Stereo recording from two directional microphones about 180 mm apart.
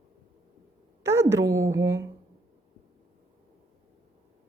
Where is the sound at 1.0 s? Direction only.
15° right (ahead or behind).